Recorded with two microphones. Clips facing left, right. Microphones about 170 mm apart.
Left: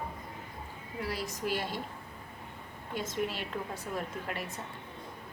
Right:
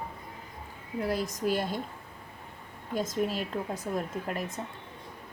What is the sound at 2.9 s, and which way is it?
A woman's voice, 40° right (ahead or behind).